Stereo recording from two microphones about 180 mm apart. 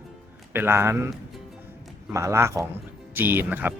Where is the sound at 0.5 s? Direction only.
15° right (ahead or behind).